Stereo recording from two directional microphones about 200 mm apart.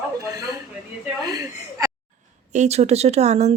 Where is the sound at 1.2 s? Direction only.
20° right (ahead or behind).